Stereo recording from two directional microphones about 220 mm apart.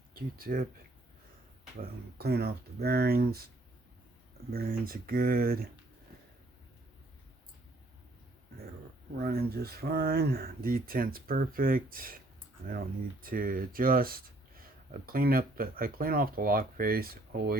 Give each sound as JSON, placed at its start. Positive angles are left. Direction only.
{"t": 0.1, "sound": "speech", "side_deg": -40}
{"t": 1.8, "sound": "speech", "side_deg": -45}
{"t": 4.5, "sound": "speech", "side_deg": -40}
{"t": 9.1, "sound": "speech", "side_deg": -45}